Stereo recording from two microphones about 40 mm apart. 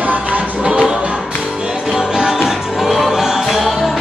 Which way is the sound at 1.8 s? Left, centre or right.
Centre.